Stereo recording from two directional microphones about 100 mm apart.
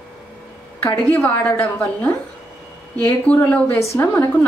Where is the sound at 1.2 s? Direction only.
25° left (ahead or behind).